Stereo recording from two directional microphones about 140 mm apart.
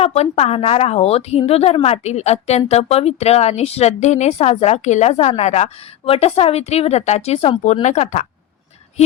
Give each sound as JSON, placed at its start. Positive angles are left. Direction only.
{"t": 0.0, "sound": "a woman's voice", "side_deg": 50}